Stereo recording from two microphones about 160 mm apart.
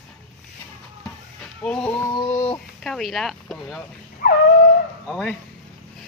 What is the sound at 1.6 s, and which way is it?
Dog, 5° left (ahead or behind).